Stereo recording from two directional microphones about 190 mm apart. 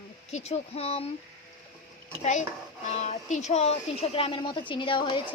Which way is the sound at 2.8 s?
35° left (ahead or behind).